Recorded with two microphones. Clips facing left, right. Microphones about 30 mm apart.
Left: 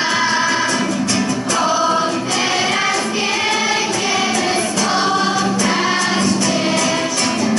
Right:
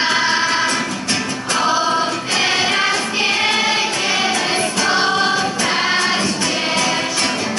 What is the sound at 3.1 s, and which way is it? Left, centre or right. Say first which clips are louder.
Choir: right 1 dB; right.